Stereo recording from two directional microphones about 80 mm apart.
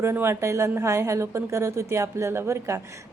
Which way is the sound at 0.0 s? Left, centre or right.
Right.